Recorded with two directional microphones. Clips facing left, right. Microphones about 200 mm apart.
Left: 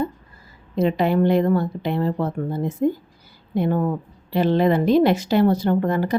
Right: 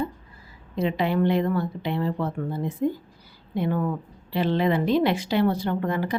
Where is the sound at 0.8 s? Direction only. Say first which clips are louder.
Left 5 dB; 45° left (ahead or behind).